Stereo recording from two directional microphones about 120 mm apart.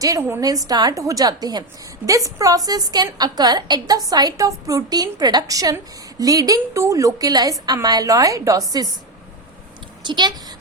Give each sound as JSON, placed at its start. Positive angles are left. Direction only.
{"t": 0.0, "sound": "a woman's voice", "side_deg": -25}
{"t": 10.0, "sound": "a woman's voice", "side_deg": -40}